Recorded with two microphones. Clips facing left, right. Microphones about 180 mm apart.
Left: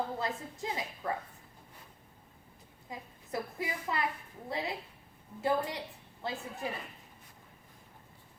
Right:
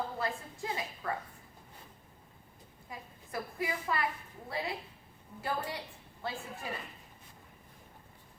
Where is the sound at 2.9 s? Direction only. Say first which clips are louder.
Left 3 dB; 20° left (ahead or behind).